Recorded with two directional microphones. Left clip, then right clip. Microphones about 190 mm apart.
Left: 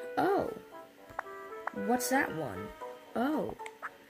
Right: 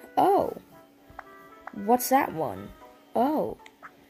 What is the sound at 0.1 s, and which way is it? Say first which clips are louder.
Music: right 8 dB; 10° right (ahead or behind).